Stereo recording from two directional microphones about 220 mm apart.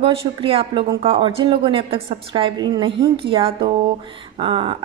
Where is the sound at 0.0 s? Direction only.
25° right (ahead or behind).